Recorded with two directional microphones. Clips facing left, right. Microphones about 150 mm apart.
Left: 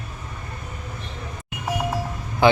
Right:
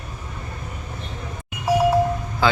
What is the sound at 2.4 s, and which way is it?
Speech, 20° left (ahead or behind).